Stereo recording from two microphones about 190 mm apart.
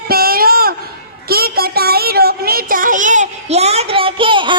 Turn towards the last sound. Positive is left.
turn(degrees=-25)  # may be behind; listen again after turning